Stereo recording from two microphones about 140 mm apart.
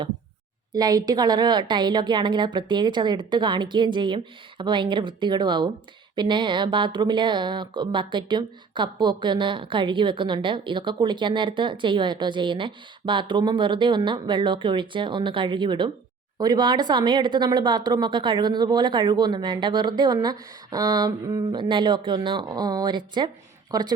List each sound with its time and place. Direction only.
0.7 s a woman's voice: 25° right (ahead or behind)